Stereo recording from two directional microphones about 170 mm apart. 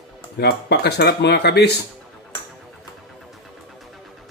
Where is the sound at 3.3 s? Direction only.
Centre (ahead or behind).